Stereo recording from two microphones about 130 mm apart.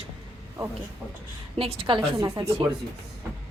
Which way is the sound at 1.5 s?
45° right (ahead or behind).